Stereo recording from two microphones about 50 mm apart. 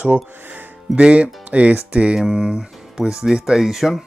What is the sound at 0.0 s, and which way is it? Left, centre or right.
Speech, right.